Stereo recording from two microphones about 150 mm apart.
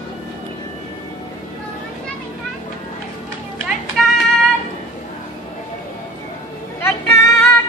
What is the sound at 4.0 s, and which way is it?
Female singing, centre (ahead or behind).